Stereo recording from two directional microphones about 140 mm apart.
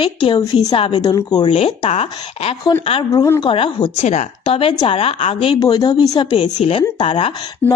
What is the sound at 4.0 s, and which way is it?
Speech, 55° left (ahead or behind).